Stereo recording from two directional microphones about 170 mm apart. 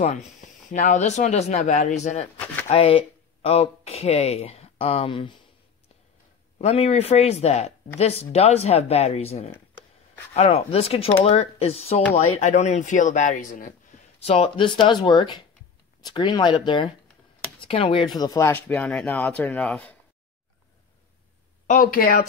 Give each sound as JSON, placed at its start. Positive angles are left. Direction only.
{"t": 0.4, "sound": "speech", "side_deg": 50}
{"t": 2.3, "sound": "a sound", "side_deg": 10}
{"t": 2.7, "sound": "speech", "side_deg": 35}
{"t": 6.6, "sound": "speech", "side_deg": 40}
{"t": 9.5, "sound": "a sound", "side_deg": 10}
{"t": 10.3, "sound": "speech", "side_deg": 35}
{"t": 14.2, "sound": "speech", "side_deg": 35}
{"t": 21.6, "sound": "speech", "side_deg": 55}